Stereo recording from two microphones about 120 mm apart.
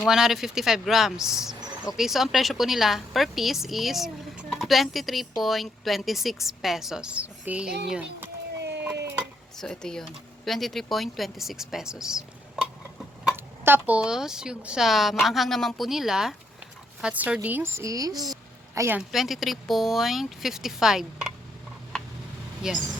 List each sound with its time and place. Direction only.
0.1 s a woman's voice: 5° right (ahead or behind)
8.8 s a sound: 15° right (ahead or behind)
9.6 s a woman's voice: 5° left (ahead or behind)
13.3 s a woman's voice: 20° right (ahead or behind)
18.9 s a woman's voice: centre (ahead or behind)
22.6 s a woman's voice: 5° right (ahead or behind)